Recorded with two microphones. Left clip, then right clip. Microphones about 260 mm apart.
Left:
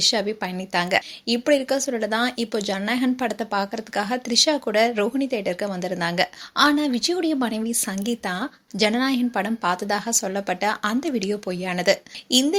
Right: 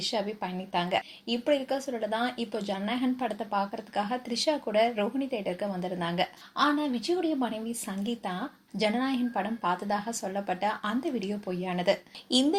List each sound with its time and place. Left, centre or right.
0.0 s a woman's voice: left